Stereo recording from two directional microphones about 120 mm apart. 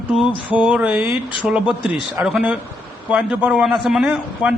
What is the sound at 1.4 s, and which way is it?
Speech, 5° right (ahead or behind).